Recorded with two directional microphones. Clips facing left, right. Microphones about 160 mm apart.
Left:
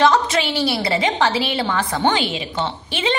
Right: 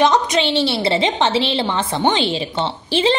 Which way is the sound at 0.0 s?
20° right (ahead or behind).